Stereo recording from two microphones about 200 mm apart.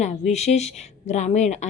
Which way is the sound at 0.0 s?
35° left (ahead or behind).